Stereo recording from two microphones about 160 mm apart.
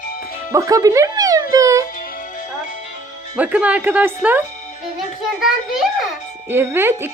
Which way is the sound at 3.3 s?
10° right (ahead or behind).